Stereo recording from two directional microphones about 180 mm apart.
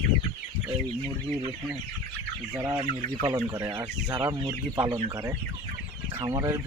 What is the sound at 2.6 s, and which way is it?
Speech, 15° right (ahead or behind).